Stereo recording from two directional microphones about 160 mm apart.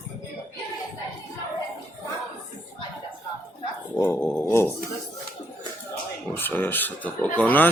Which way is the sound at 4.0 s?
10° left (ahead or behind).